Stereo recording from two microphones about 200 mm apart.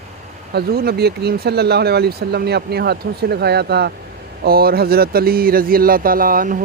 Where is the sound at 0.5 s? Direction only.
50° right (ahead or behind).